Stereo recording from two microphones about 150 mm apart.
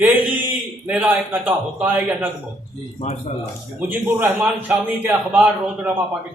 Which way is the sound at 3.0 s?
50° left (ahead or behind).